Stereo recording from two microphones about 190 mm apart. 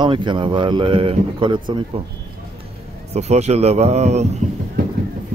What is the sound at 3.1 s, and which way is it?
Speech, 35° right (ahead or behind).